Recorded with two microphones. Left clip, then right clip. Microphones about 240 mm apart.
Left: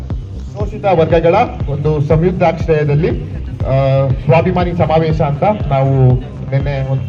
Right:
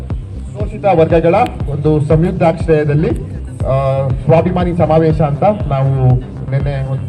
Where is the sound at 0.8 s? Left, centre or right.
Right.